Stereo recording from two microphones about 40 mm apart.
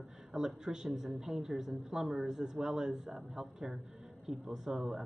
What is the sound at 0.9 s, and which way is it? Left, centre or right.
A man's voice, centre.